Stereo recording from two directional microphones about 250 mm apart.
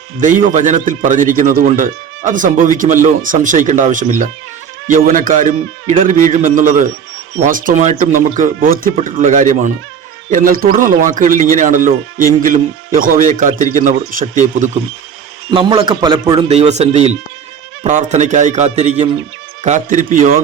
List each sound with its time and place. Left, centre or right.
0.2 s speech: right
15.4 s a man's voice: centre